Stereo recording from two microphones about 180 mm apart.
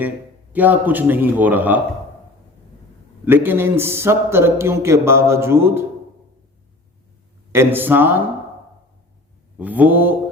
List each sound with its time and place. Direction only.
0.5 s speech: 10° right (ahead or behind)
3.2 s speech: 10° right (ahead or behind)
7.5 s speech: 15° right (ahead or behind)
9.6 s speech: 10° right (ahead or behind)